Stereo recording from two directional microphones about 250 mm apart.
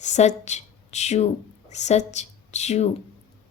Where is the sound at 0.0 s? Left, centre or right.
Left.